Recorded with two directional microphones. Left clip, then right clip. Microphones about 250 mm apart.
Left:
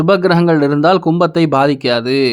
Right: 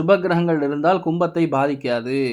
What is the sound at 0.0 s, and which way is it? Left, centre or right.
Speech, left.